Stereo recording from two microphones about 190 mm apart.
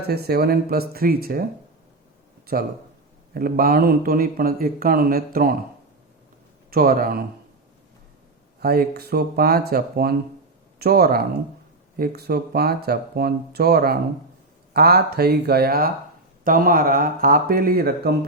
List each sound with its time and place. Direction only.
0.1 s speech: 55° right (ahead or behind)
3.3 s speech: 50° right (ahead or behind)
6.7 s speech: 50° right (ahead or behind)
8.6 s speech: 55° right (ahead or behind)